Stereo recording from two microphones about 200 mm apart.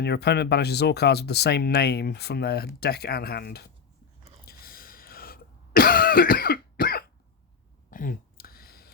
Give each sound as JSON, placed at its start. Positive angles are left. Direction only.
{"t": 0.0, "sound": "speech", "side_deg": 55}
{"t": 4.4, "sound": "cough", "side_deg": 50}
{"t": 7.9, "sound": "a sound", "side_deg": 40}